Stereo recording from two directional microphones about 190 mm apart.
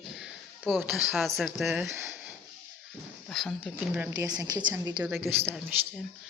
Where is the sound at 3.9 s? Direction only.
10° right (ahead or behind).